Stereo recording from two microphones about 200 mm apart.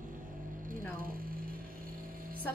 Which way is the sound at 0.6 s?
45° right (ahead or behind).